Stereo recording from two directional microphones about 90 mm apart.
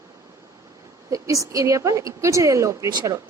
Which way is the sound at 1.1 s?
40° right (ahead or behind).